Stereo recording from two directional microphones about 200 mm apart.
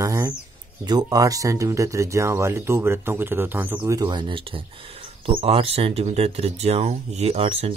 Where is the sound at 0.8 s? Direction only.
20° right (ahead or behind).